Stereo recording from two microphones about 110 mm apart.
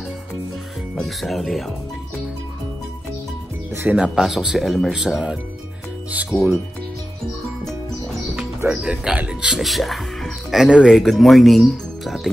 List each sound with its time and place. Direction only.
0.9 s speech: centre (ahead or behind)
3.9 s speech: 5° right (ahead or behind)
6.3 s speech: 35° left (ahead or behind)
8.6 s speech: 10° right (ahead or behind)